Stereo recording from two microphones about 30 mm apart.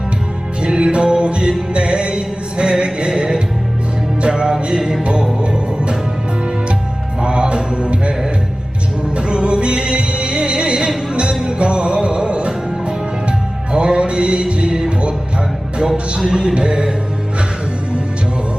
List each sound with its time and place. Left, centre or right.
0.6 s music: right
7.2 s music: right
9.1 s music: right
13.7 s music: right
16.1 s music: right